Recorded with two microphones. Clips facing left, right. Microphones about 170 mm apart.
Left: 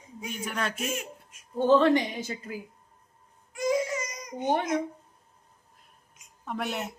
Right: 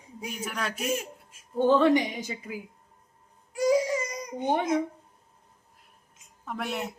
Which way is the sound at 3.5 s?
30° right (ahead or behind).